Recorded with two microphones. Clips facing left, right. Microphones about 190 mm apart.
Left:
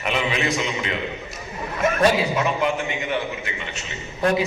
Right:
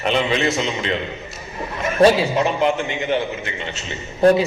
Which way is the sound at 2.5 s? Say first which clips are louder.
Right 3 dB; 30° right (ahead or behind).